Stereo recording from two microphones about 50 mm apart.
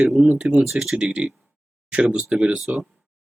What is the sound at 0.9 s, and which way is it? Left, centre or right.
Speech, centre.